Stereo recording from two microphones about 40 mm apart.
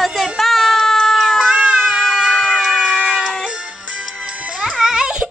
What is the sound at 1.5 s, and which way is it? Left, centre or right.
Cat, centre.